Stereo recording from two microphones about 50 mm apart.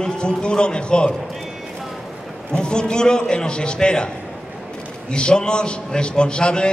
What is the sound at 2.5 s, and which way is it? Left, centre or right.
A man's voice, centre.